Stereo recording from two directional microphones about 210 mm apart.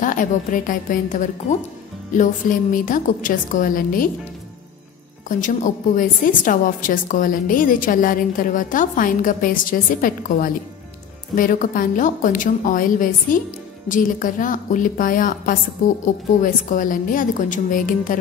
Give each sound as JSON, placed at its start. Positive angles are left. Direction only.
{"t": 0.0, "sound": "a woman's voice", "side_deg": 40}
{"t": 5.4, "sound": "a woman's voice", "side_deg": 40}